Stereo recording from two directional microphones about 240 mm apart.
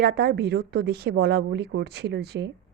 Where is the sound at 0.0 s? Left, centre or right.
Right.